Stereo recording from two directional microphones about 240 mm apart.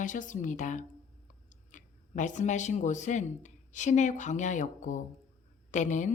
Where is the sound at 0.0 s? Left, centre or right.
Left.